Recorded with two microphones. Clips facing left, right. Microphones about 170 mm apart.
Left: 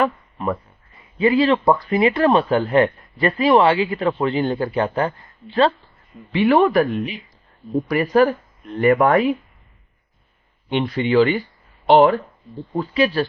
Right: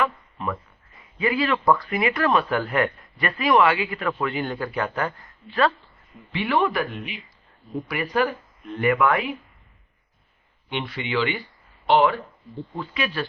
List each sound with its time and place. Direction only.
0.0 s a sound: 40° left (ahead or behind)
1.2 s speech: 30° left (ahead or behind)
6.3 s speech: 40° left (ahead or behind)
10.7 s speech: 40° left (ahead or behind)